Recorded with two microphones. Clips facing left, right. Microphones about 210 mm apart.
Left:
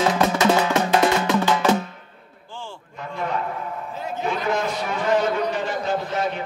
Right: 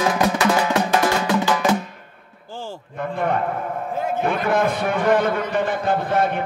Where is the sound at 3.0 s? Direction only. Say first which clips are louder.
Right 5 dB; 55° right (ahead or behind).